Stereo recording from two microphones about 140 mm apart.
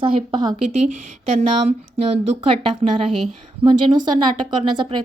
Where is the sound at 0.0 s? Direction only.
40° right (ahead or behind).